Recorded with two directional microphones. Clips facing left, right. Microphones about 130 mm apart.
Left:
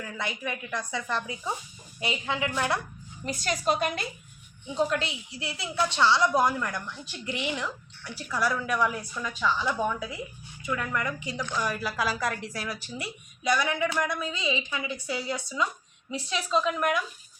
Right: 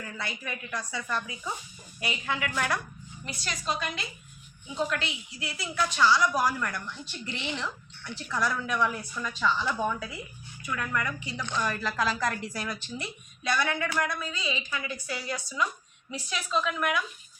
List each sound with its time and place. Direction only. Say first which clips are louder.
0.2 s speech: left 5 dB; 20° left (ahead or behind)
3.2 s a woman's voice: left 6 dB; 50° left (ahead or behind)
4.9 s a woman's voice: left 3 dB; 35° left (ahead or behind); by 9.9 s 10° left (ahead or behind)
10.6 s speech: left 1 dB; 20° left (ahead or behind)
11.4 s a woman's voice: right 1 dB; 10° left (ahead or behind); by 17.0 s 35° left (ahead or behind)